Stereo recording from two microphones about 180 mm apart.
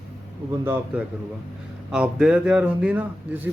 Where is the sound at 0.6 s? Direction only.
10° right (ahead or behind).